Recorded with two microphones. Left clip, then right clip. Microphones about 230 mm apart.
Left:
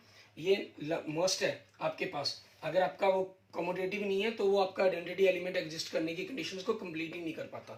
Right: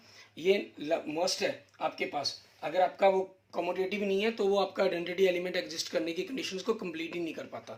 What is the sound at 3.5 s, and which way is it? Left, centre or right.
Speech, right.